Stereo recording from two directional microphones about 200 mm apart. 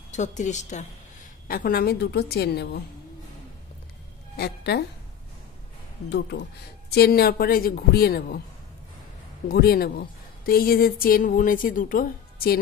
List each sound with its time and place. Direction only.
0.1 s a woman's voice: 35° left (ahead or behind)
1.5 s a woman's voice: 50° left (ahead or behind)
4.4 s a woman's voice: 55° left (ahead or behind)
6.0 s a woman's voice: 55° left (ahead or behind)
9.5 s a woman's voice: 50° left (ahead or behind)